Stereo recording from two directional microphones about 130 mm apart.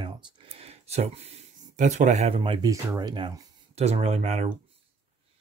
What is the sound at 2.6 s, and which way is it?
Speech, 30° right (ahead or behind).